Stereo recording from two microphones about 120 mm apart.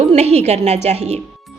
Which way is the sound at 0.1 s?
65° right (ahead or behind).